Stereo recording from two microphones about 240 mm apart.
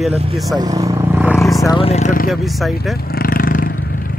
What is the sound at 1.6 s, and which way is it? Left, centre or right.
Speech, left.